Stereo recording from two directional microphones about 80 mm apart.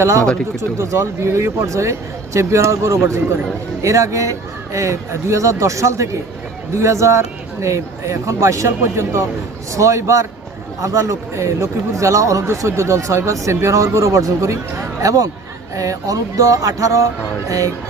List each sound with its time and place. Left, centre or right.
0.6 s speech: right